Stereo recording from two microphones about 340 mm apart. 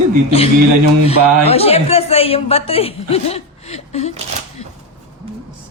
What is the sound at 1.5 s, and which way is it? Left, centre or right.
A woman's voice, centre.